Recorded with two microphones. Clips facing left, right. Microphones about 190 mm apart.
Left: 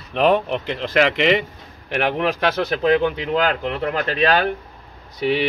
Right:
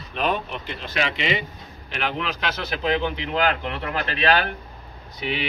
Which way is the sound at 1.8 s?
60° left (ahead or behind).